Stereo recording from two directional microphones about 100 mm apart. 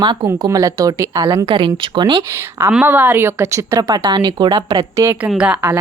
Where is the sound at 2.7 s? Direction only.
15° right (ahead or behind); by 4.0 s 35° right (ahead or behind).